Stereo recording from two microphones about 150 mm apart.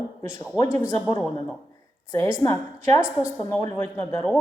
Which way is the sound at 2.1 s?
20° left (ahead or behind).